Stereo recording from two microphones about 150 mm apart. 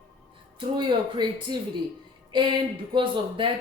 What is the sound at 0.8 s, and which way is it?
Speech, 30° right (ahead or behind).